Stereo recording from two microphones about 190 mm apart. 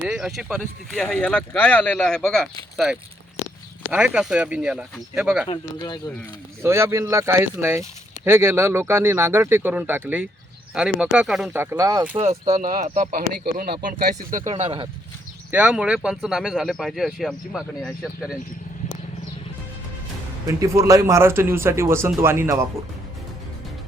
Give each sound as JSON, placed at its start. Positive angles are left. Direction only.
{"t": 0.0, "sound": "speech", "side_deg": -5}
{"t": 5.5, "sound": "speech", "side_deg": 20}
{"t": 6.6, "sound": "speech", "side_deg": -15}
{"t": 11.6, "sound": "speech", "side_deg": -15}
{"t": 12.6, "sound": "speech", "side_deg": -45}
{"t": 14.3, "sound": "speech", "side_deg": -35}
{"t": 15.5, "sound": "speech", "side_deg": -5}
{"t": 20.5, "sound": "speech", "side_deg": -15}